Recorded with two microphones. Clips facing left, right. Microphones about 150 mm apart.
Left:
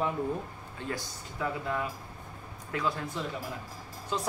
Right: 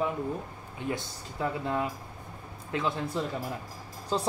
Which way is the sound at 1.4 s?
25° right (ahead or behind).